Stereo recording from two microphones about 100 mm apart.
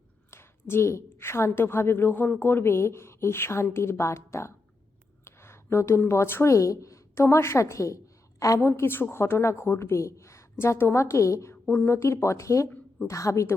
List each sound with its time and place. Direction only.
0.3 s a woman's voice: 25° left (ahead or behind)